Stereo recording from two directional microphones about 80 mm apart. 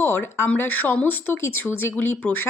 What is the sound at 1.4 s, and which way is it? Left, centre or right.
Speech, left.